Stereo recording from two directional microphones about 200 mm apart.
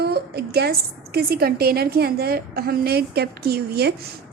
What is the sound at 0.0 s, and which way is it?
A woman's voice, 55° right (ahead or behind).